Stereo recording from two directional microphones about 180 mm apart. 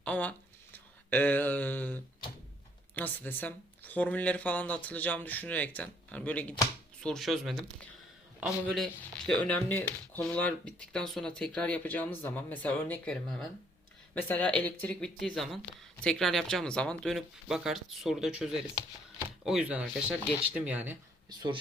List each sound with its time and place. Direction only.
0.0 s a sound: 5° left (ahead or behind)
2.9 s speech: 10° left (ahead or behind); by 21.0 s 10° right (ahead or behind)
21.2 s speech: 25° right (ahead or behind)